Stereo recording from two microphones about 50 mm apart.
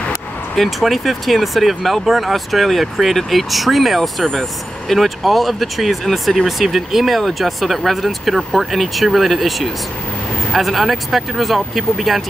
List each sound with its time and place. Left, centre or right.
0.6 s speech: centre